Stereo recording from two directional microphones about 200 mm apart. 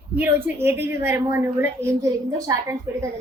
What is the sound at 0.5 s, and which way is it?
A woman's voice, 10° right (ahead or behind).